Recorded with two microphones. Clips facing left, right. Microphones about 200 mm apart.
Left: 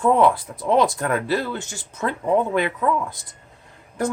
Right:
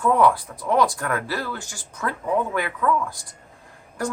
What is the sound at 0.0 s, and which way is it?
Speech, 25° left (ahead or behind).